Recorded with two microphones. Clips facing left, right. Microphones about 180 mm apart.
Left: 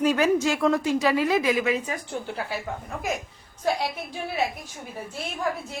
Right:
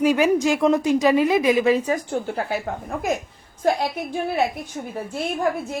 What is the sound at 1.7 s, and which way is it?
A woman's voice, 35° right (ahead or behind).